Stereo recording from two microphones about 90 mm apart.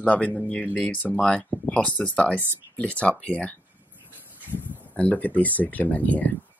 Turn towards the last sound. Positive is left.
turn(degrees=20)  # may be behind; listen again after turning